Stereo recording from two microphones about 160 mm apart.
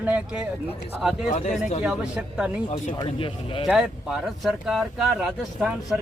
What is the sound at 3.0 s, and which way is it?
Speech, 35° left (ahead or behind).